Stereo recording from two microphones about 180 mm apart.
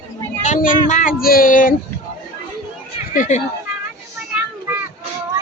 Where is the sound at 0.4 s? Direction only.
45° left (ahead or behind).